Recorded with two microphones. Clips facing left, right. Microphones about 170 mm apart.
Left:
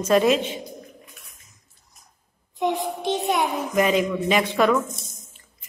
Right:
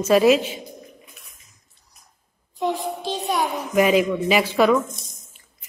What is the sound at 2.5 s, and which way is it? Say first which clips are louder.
Music: even; 20° left (ahead or behind).